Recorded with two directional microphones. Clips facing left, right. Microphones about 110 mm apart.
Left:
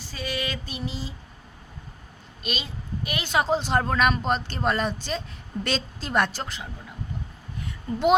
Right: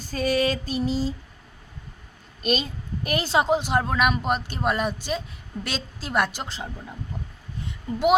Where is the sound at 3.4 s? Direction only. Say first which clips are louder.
Left 1 dB; 15° right (ahead or behind).